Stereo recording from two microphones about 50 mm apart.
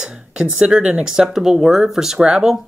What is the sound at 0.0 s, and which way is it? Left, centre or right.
Speech, right.